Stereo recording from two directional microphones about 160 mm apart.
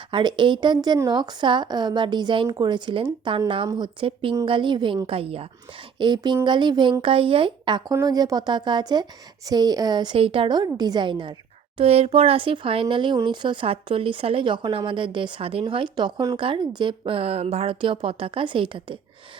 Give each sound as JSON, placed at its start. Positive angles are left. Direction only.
{"t": 0.1, "sound": "a woman's voice", "side_deg": -30}